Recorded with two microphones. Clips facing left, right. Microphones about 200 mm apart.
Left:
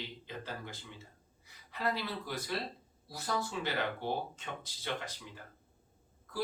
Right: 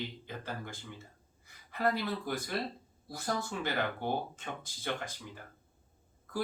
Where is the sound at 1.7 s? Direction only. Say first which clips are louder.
Right 4 dB; 50° right (ahead or behind).